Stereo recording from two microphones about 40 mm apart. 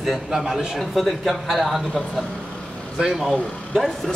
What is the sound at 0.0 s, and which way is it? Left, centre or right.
Speech, centre.